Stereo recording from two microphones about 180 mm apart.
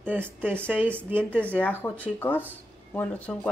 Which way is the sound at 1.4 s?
10° left (ahead or behind).